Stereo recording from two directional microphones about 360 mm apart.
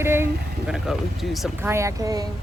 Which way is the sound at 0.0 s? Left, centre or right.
Centre.